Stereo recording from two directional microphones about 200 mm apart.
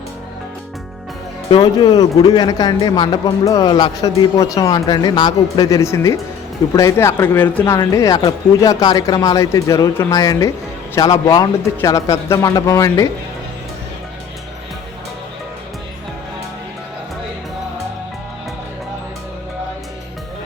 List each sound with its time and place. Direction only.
1.5 s speech: 20° left (ahead or behind)